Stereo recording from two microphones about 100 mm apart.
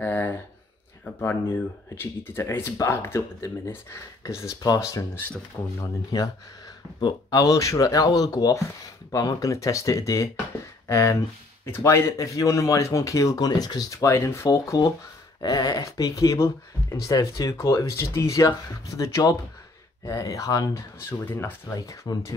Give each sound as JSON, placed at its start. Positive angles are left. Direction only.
{"t": 0.0, "sound": "a sound", "side_deg": 20}
{"t": 1.2, "sound": "speech", "side_deg": 20}
{"t": 21.3, "sound": "speech", "side_deg": 20}
{"t": 21.7, "sound": "speech", "side_deg": 40}